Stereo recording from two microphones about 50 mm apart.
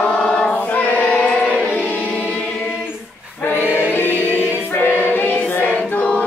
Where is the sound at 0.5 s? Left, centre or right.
Left.